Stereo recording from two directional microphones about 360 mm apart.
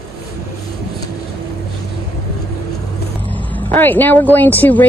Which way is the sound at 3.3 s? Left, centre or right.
Centre.